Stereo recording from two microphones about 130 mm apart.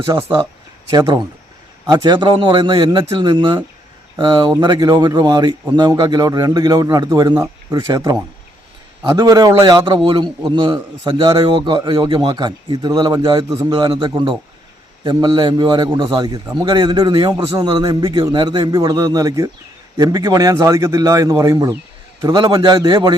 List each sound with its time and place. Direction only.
0.1 s a man's voice: 35° right (ahead or behind)